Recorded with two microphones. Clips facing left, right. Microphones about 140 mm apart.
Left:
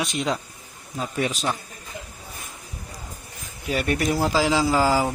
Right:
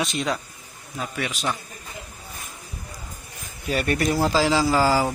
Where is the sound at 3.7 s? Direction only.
15° left (ahead or behind).